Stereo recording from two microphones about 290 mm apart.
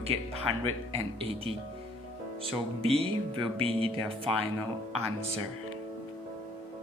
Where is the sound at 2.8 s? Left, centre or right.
Centre.